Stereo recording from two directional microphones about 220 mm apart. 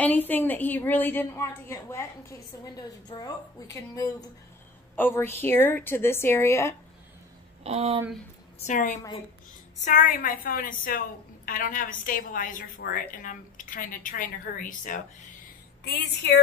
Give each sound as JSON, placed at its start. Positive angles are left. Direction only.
{"t": 0.0, "sound": "a woman's voice", "side_deg": 10}
{"t": 7.6, "sound": "speech", "side_deg": -30}
{"t": 8.6, "sound": "a woman's voice", "side_deg": 35}
{"t": 15.8, "sound": "a woman's voice", "side_deg": 50}